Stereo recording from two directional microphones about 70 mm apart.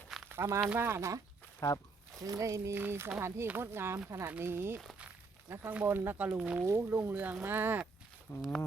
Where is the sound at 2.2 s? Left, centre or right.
Right.